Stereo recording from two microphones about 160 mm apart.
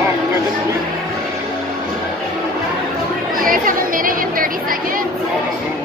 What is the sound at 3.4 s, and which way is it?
Chatter, 60° right (ahead or behind).